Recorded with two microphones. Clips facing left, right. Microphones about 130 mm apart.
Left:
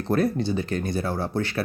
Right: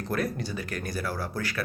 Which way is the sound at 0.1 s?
30° left (ahead or behind).